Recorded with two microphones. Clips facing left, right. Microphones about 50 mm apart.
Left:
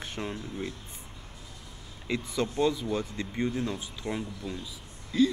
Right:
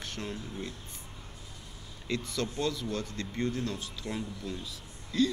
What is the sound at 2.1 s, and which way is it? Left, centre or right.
Speech, centre.